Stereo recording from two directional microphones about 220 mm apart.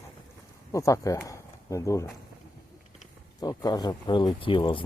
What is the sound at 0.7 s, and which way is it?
Speech, 15° left (ahead or behind).